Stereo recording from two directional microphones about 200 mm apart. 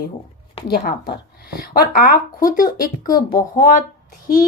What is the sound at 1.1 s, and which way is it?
Speech, 50° left (ahead or behind).